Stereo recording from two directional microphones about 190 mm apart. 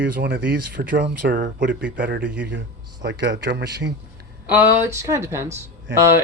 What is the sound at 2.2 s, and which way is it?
Speech, 5° right (ahead or behind).